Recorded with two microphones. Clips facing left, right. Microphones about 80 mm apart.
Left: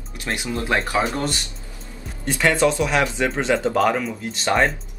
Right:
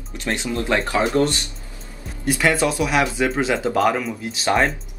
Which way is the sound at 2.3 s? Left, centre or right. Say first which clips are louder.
Left 1 dB; centre.